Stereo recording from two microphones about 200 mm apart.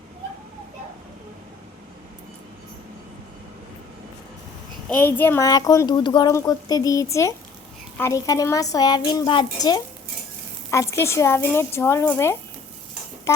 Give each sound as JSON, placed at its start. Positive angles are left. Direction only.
{"t": 4.9, "sound": "a woman's voice", "side_deg": 10}